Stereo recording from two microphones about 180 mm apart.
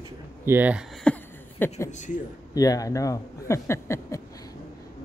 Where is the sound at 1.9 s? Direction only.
45° left (ahead or behind).